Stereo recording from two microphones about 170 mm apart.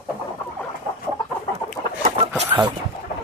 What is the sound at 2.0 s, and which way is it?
Chicken, 40° right (ahead or behind).